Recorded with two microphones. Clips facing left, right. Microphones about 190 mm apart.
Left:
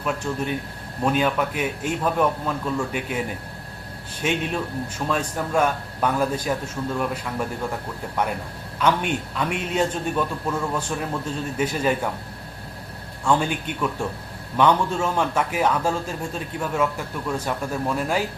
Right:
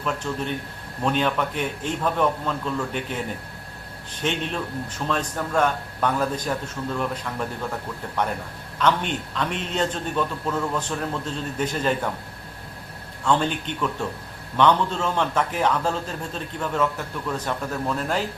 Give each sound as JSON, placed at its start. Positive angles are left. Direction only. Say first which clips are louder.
{"t": 0.0, "sound": "a man's voice", "louder": "left 1 dB", "side_deg": 10}
{"t": 13.2, "sound": "a man's voice", "louder": "left 1 dB", "side_deg": 10}